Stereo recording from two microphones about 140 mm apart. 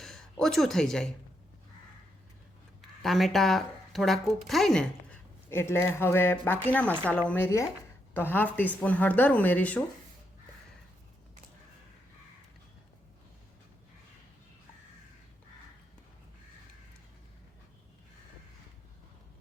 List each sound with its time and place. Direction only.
0.0 s speech: 5° left (ahead or behind)
3.0 s speech: centre (ahead or behind)
5.5 s speech: 15° left (ahead or behind)